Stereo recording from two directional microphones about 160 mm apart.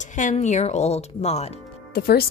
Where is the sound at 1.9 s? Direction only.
70° left (ahead or behind).